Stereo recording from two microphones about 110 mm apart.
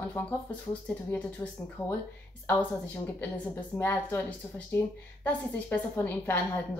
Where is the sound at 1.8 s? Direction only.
25° left (ahead or behind).